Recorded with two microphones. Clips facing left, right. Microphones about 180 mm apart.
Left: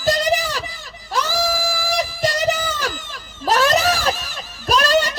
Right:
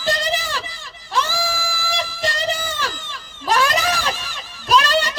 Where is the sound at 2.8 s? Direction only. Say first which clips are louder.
Left 2 dB; 45° left (ahead or behind).